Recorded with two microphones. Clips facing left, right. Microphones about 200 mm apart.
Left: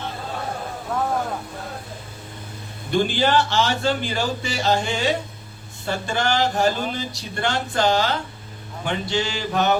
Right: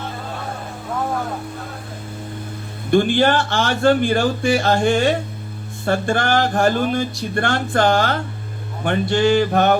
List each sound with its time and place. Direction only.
2.9 s speech: 55° right (ahead or behind)